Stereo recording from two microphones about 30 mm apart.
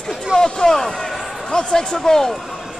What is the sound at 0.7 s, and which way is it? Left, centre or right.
Speech, centre.